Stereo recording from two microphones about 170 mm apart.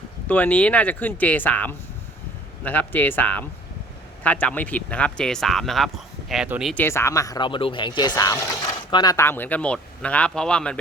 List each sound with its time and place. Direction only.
0.3 s speech: 10° left (ahead or behind)
6.7 s speech: 15° left (ahead or behind)